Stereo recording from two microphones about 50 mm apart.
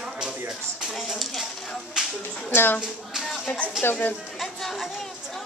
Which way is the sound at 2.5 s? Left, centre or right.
Left.